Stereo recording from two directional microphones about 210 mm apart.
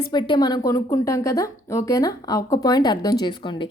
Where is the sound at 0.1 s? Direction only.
20° left (ahead or behind).